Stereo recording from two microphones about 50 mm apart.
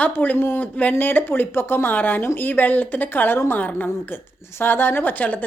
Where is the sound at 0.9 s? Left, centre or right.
Left.